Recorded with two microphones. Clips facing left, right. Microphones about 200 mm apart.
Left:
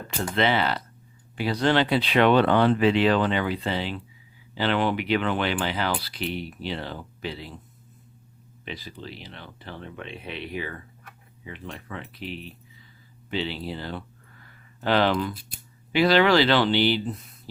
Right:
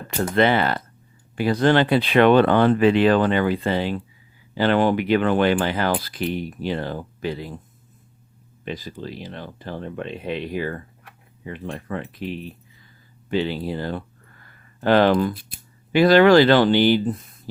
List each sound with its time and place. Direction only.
0.2 s speech: 50° right (ahead or behind)
8.6 s speech: 45° right (ahead or behind)
14.4 s a sound: 50° right (ahead or behind)
15.9 s speech: 50° right (ahead or behind)